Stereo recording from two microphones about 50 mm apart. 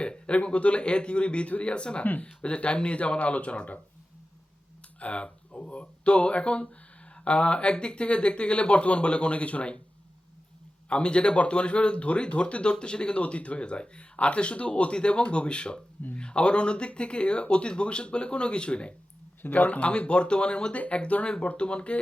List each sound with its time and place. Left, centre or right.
0.0 s speech: left
4.9 s speech: left
10.8 s speech: left
19.4 s speech: left
20.7 s speech: left